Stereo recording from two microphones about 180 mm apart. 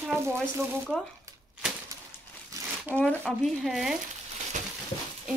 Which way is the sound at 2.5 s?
20° right (ahead or behind).